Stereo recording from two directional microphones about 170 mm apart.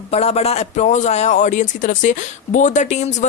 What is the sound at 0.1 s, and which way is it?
A man's voice, 40° left (ahead or behind).